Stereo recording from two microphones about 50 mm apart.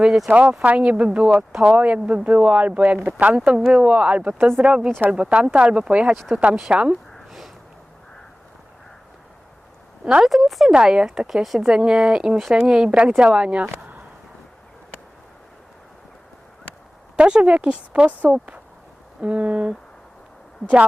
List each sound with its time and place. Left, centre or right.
0.0 s speech: centre
0.3 s speech: right
4.4 s speech: right
4.6 s speech: right
7.3 s a sound: centre
10.0 s speech: centre
10.2 s speech: centre
10.8 s speech: centre
17.2 s speech: centre